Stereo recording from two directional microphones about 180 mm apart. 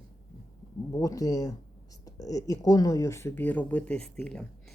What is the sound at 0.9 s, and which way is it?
Speech, 20° left (ahead or behind).